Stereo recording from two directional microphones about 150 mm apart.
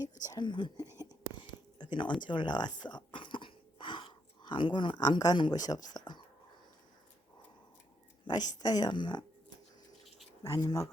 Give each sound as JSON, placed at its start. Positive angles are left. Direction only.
{"t": 0.2, "sound": "speech", "side_deg": 25}
{"t": 1.8, "sound": "speech", "side_deg": 30}
{"t": 8.2, "sound": "speech", "side_deg": 25}
{"t": 10.4, "sound": "speech", "side_deg": 25}